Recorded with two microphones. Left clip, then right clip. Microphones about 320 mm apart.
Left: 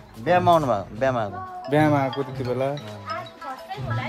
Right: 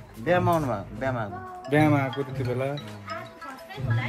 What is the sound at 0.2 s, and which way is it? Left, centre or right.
Speech, left.